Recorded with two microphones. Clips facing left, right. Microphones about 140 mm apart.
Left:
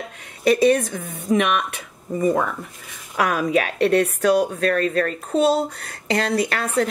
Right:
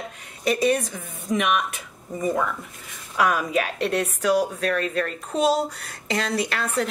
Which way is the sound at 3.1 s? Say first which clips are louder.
Left 2 dB; 60° left (ahead or behind).